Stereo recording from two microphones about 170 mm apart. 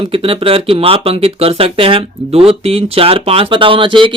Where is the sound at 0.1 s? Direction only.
35° right (ahead or behind).